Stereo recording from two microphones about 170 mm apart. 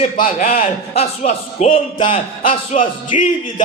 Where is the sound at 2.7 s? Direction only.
45° left (ahead or behind).